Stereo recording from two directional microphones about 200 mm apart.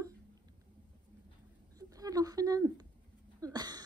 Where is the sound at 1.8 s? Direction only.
15° right (ahead or behind).